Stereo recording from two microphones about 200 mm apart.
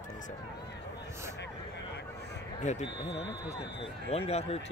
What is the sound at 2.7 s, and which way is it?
Speech, 35° left (ahead or behind).